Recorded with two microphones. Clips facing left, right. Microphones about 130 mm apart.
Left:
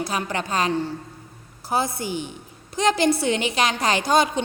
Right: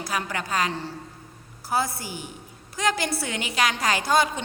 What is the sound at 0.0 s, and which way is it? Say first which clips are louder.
A woman's voice: left 3 dB; 25° left (ahead or behind).